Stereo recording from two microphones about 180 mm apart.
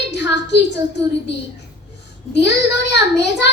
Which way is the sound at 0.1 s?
70° left (ahead or behind).